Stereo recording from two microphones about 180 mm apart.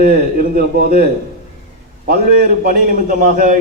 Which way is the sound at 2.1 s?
50° right (ahead or behind).